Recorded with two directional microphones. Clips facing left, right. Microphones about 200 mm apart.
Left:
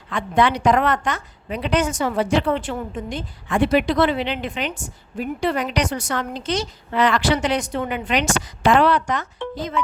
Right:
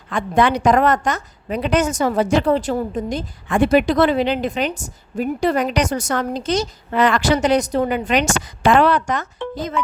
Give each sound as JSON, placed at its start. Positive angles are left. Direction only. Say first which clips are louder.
{"t": 0.1, "sound": "a woman's voice", "louder": "right 2 dB", "side_deg": -45}